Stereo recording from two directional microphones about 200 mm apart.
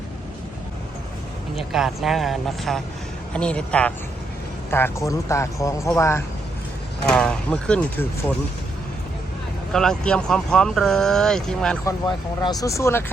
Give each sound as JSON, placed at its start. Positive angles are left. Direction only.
{"t": 1.5, "sound": "speech", "side_deg": 0}
{"t": 9.7, "sound": "speech", "side_deg": 5}
{"t": 11.9, "sound": "speech", "side_deg": 20}